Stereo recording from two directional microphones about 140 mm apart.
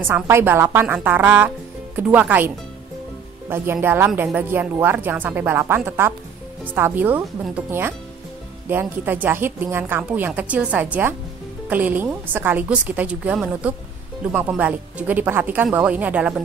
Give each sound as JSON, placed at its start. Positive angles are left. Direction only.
{"t": 0.0, "sound": "a woman's voice", "side_deg": -15}
{"t": 8.6, "sound": "a woman's voice", "side_deg": -15}